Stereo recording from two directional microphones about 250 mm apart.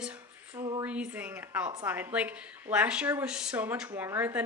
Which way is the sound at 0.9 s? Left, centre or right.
Centre.